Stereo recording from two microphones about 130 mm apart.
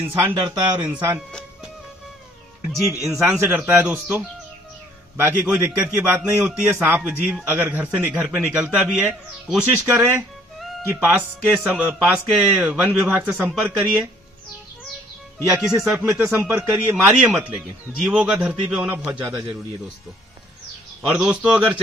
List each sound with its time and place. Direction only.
0.0 s speech: 40° right (ahead or behind)
3.1 s a man's voice: 15° right (ahead or behind)
15.4 s a man's voice: 5° right (ahead or behind)
19.0 s a man's voice: 20° right (ahead or behind)
21.0 s a man's voice: 5° right (ahead or behind)